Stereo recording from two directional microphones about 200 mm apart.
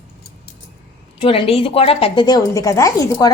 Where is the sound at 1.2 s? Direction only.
30° left (ahead or behind).